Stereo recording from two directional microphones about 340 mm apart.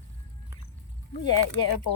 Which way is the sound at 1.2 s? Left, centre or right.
Left.